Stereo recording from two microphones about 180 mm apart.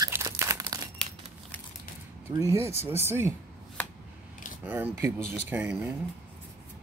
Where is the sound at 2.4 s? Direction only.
15° right (ahead or behind).